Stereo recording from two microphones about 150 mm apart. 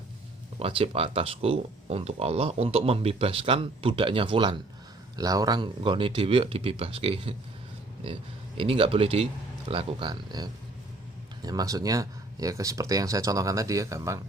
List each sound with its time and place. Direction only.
0.6 s speech: 40° right (ahead or behind); by 14.2 s 20° right (ahead or behind)